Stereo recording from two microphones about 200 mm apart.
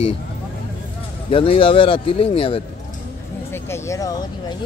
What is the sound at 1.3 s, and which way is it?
Speech, 25° left (ahead or behind).